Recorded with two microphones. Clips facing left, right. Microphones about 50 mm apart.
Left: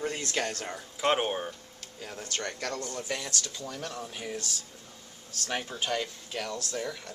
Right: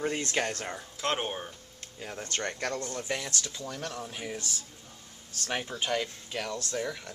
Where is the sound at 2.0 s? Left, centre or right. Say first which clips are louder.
Right 2 dB; centre.